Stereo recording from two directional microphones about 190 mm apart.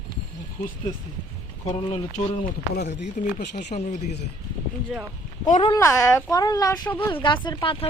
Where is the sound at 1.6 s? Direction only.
35° left (ahead or behind).